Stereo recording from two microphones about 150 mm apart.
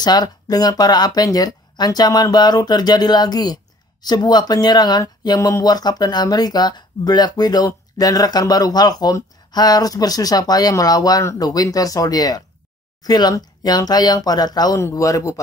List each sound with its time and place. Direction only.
0.0 s speech: 25° left (ahead or behind)